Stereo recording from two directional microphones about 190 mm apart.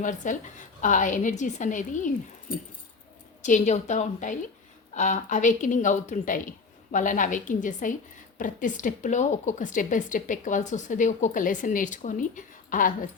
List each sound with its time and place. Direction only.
0.0 s a woman's voice: 40° left (ahead or behind)